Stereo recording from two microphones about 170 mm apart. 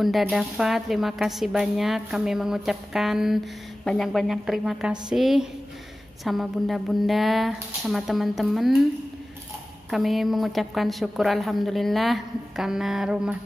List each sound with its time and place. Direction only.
0.0 s a woman's voice: centre (ahead or behind)
9.8 s a woman's voice: centre (ahead or behind)